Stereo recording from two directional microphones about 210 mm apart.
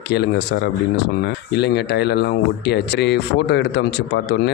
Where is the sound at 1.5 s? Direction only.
55° left (ahead or behind).